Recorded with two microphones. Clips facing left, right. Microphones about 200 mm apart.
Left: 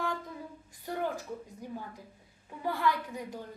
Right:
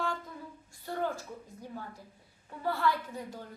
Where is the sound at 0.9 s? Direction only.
15° left (ahead or behind).